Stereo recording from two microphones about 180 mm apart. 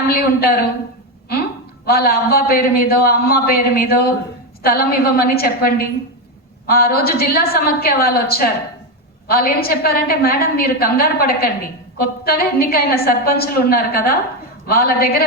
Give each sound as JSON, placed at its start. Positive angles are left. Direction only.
{"t": 0.1, "sound": "a woman's voice", "side_deg": 60}